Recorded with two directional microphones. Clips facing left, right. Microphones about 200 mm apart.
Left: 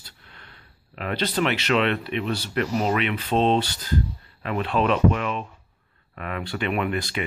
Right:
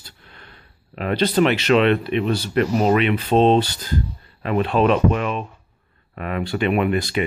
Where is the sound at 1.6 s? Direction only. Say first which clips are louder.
Right 6 dB; 30° right (ahead or behind).